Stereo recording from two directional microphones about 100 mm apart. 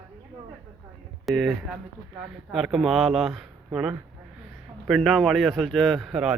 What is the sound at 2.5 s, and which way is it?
Speech, 5° right (ahead or behind).